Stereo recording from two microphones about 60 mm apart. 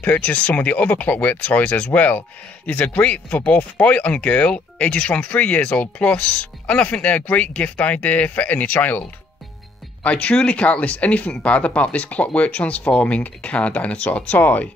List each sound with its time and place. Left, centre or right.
0.0 s speech: left
10.0 s speech: left